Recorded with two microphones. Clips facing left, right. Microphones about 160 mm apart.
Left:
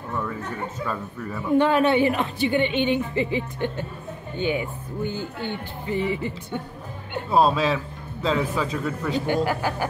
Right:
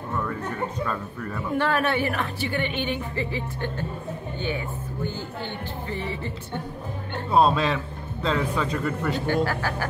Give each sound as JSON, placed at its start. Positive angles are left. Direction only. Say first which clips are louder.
{"t": 0.1, "sound": "speech", "louder": "even", "side_deg": 5}
{"t": 1.5, "sound": "a woman's voice", "louder": "left 6 dB", "side_deg": 20}
{"t": 7.2, "sound": "speech", "louder": "left 1 dB", "side_deg": 0}
{"t": 9.2, "sound": "speech", "louder": "left 2 dB", "side_deg": 15}